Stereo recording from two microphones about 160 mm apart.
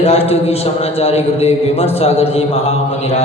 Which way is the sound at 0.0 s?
40° left (ahead or behind).